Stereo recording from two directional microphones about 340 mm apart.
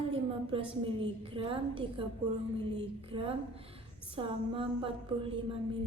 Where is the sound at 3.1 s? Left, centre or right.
Centre.